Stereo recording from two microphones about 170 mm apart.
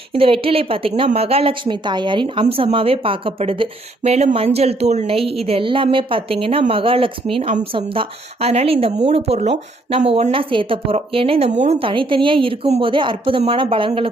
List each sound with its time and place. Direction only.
0.1 s a woman's voice: 35° right (ahead or behind)